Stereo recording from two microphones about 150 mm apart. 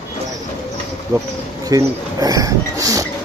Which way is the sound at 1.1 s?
25° right (ahead or behind).